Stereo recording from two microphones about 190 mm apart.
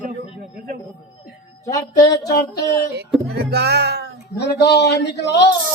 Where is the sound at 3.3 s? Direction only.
60° right (ahead or behind).